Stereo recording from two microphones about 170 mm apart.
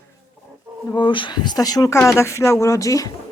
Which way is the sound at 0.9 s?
30° left (ahead or behind).